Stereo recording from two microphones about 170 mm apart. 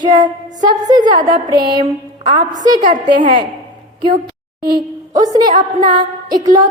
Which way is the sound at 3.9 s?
25° right (ahead or behind).